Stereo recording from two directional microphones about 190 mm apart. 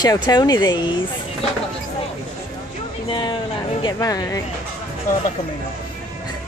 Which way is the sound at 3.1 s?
25° left (ahead or behind).